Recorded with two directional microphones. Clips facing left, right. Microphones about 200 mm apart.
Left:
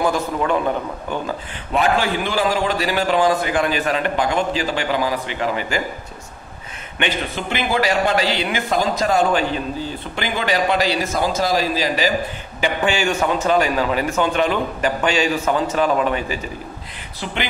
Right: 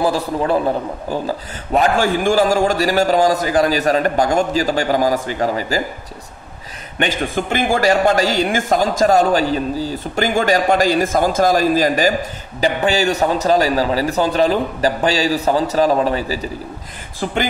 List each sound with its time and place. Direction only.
0.0 s a man's voice: 35° right (ahead or behind)
7.0 s speech: 45° right (ahead or behind)
12.5 s a man's voice: 40° right (ahead or behind)
17.2 s speech: 45° right (ahead or behind)